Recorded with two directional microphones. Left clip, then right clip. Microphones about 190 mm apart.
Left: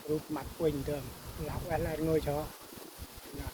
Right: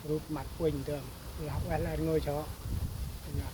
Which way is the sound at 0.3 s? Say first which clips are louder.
Left 1 dB; 5° right (ahead or behind).